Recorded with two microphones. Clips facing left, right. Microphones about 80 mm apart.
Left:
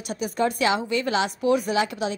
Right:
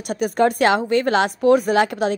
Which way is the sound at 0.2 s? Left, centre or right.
Right.